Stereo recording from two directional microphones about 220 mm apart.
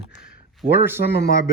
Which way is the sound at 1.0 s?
45° left (ahead or behind).